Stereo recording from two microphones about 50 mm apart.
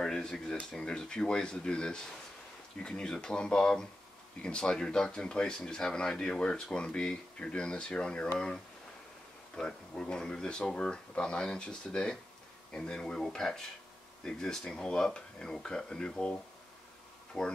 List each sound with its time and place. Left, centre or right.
0.0 s a sound: centre
0.7 s speech: centre
9.6 s speech: centre